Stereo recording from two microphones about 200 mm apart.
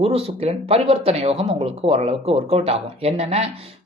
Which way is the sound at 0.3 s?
30° right (ahead or behind).